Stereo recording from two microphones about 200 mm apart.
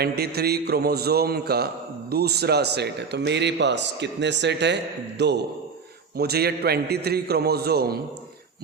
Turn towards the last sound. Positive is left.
turn(degrees=-50)  # may be behind; listen again after turning